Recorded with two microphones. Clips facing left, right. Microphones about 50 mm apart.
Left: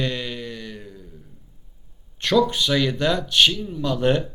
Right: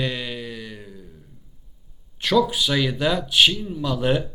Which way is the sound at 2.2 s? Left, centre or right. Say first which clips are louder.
Even; centre.